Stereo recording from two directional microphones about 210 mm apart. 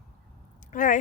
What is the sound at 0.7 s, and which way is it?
Speech, 40° left (ahead or behind).